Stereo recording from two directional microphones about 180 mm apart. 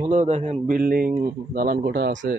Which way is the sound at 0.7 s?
50° right (ahead or behind).